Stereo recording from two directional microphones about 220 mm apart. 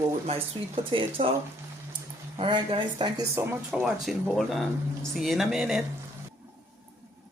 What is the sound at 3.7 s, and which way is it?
Speech, centre (ahead or behind).